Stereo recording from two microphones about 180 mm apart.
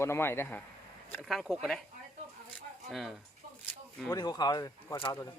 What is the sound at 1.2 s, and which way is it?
Speech, centre (ahead or behind).